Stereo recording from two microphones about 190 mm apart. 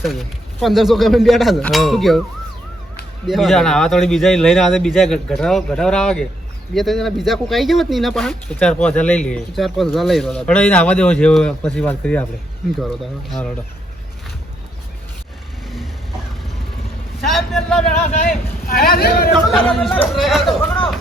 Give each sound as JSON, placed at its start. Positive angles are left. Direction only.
{"t": 0.0, "sound": "speech", "side_deg": 0}
{"t": 3.2, "sound": "speech", "side_deg": 0}
{"t": 15.6, "sound": "vehicle", "side_deg": 0}
{"t": 17.2, "sound": "speech", "side_deg": 0}
{"t": 18.0, "sound": "speech", "side_deg": 50}
{"t": 20.1, "sound": "speech", "side_deg": 0}